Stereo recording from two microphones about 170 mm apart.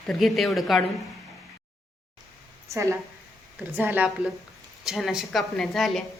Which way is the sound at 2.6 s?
20° right (ahead or behind).